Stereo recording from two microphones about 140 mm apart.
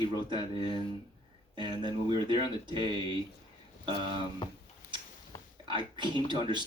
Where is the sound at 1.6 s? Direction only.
30° right (ahead or behind).